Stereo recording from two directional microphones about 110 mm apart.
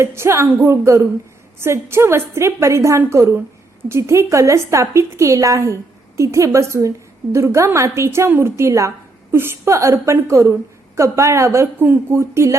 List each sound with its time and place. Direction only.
0.0 s a woman's voice: 25° right (ahead or behind)